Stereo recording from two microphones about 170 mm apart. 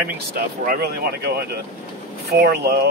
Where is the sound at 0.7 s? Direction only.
65° right (ahead or behind).